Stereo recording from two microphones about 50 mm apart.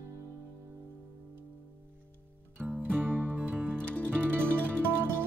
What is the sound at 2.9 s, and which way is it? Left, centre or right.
Music, right.